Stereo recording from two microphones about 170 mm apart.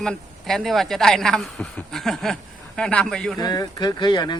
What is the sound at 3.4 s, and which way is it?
Speech, 20° left (ahead or behind).